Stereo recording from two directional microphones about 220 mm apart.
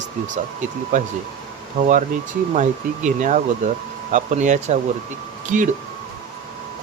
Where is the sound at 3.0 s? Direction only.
35° right (ahead or behind).